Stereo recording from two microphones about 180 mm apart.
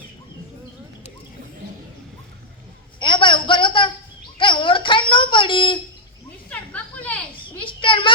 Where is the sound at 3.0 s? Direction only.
25° left (ahead or behind).